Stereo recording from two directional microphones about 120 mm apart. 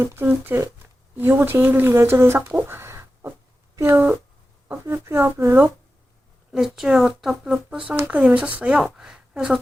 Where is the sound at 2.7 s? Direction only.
20° right (ahead or behind).